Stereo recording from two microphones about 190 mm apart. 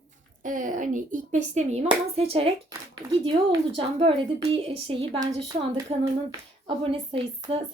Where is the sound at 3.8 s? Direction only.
30° right (ahead or behind).